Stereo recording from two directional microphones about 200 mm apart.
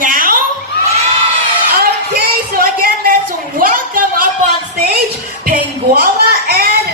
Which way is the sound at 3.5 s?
45° right (ahead or behind).